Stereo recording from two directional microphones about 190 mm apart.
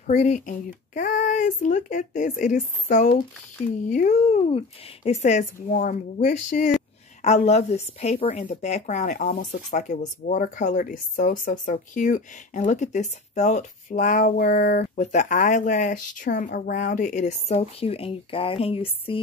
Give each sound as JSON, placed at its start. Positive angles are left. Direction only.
{"t": 0.0, "sound": "a woman's voice", "side_deg": 40}
{"t": 7.2, "sound": "a woman's voice", "side_deg": 35}
{"t": 15.0, "sound": "a woman's voice", "side_deg": 40}